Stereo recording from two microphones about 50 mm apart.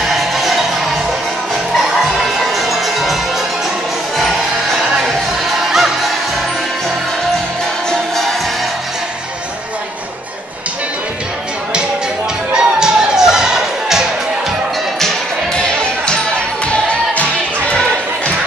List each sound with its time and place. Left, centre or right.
0.0 s music: centre
5.7 s music: centre
12.5 s music: centre
15.5 s music: centre